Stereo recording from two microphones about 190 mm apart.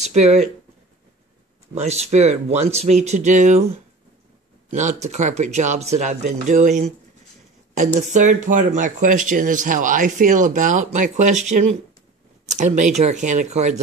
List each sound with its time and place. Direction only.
0.0 s speech: 35° right (ahead or behind)
1.8 s speech: 35° right (ahead or behind)
4.6 s speech: 40° right (ahead or behind)